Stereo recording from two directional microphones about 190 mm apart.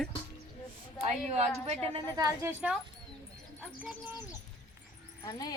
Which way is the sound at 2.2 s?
15° right (ahead or behind).